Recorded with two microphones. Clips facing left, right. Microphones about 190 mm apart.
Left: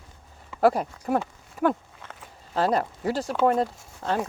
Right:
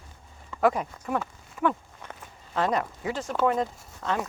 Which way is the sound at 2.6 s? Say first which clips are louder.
Left 3 dB; 35° left (ahead or behind).